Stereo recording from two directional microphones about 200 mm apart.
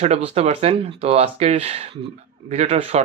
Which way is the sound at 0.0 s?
30° right (ahead or behind).